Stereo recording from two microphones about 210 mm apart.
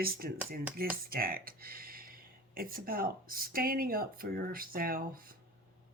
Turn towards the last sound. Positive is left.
turn(degrees=-45)  # may be behind; listen again after turning